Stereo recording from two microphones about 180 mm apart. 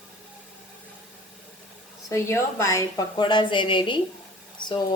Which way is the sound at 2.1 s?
15° left (ahead or behind).